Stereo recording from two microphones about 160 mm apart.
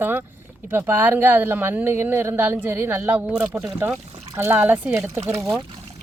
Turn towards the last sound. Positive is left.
turn(degrees=-15)  # may be behind; listen again after turning